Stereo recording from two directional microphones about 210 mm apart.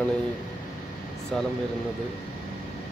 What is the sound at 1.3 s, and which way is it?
Speech, centre (ahead or behind).